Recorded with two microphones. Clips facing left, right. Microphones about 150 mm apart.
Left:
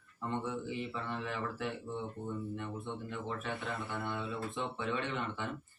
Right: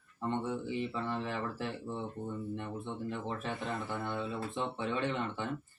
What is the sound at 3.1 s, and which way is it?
Speech, 30° right (ahead or behind).